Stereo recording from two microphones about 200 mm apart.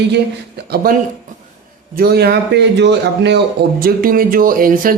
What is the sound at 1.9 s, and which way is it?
Speech, 50° right (ahead or behind).